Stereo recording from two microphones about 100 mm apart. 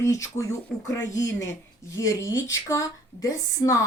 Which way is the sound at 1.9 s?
30° left (ahead or behind).